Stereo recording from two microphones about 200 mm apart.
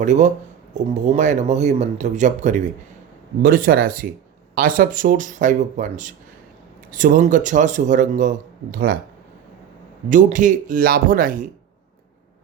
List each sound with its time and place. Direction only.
0.0 s speech: 35° right (ahead or behind)
10.1 s speech: 40° right (ahead or behind)